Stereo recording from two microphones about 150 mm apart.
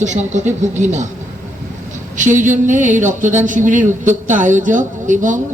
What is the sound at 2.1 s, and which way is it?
Speech, 55° right (ahead or behind).